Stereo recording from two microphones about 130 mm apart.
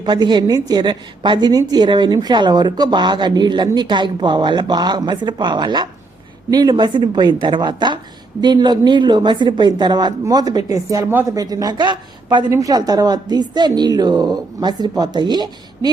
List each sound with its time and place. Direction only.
0.0 s a woman's voice: 35° right (ahead or behind)